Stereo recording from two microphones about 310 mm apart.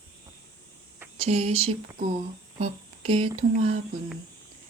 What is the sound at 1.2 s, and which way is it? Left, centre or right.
Music, right.